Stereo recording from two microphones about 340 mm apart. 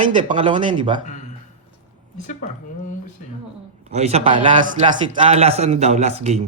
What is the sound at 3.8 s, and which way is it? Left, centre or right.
A man's voice, centre.